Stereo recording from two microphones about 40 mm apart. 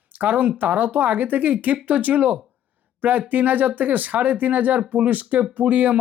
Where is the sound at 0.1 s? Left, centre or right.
Right.